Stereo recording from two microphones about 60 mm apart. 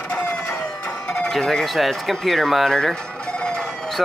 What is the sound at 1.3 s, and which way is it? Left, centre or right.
Speech, centre.